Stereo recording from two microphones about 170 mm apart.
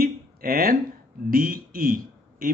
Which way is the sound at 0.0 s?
60° right (ahead or behind).